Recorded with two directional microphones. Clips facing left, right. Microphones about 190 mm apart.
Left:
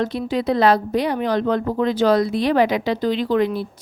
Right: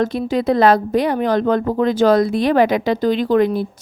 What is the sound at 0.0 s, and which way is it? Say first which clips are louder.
Speech: right 3 dB; 45° right (ahead or behind).